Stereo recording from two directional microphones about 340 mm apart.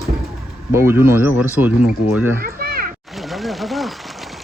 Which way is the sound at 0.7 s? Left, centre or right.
Centre.